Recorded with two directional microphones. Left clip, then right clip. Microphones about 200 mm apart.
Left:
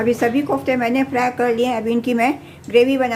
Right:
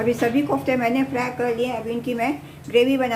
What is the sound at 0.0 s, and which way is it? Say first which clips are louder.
A woman's voice: left 3 dB; 20° left (ahead or behind).